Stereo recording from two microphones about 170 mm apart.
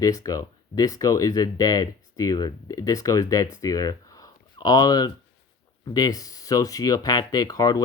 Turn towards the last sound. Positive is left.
turn(degrees=20)  # may be behind; listen again after turning